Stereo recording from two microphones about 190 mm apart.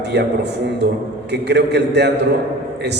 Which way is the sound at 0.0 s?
60° right (ahead or behind).